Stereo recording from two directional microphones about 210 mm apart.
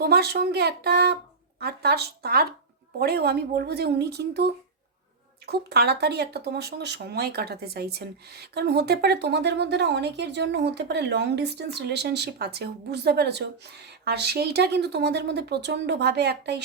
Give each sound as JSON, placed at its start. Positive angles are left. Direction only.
{"t": 0.0, "sound": "speech", "side_deg": -50}